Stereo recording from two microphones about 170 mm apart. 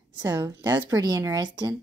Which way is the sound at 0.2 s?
25° right (ahead or behind).